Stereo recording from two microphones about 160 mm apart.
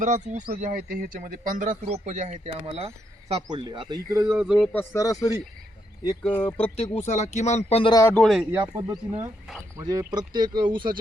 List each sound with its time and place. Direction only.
0.0 s speech: 50° right (ahead or behind)
0.6 s speech: 60° right (ahead or behind); by 3.6 s 40° right (ahead or behind)
3.6 s speech: 25° right (ahead or behind)
4.4 s speech: 5° right (ahead or behind)
4.7 s speech: 15° left (ahead or behind)
6.3 s speech: 10° left (ahead or behind)
6.6 s speech: 40° left (ahead or behind)
8.1 s speech: centre (ahead or behind)
8.7 s speech: 25° right (ahead or behind)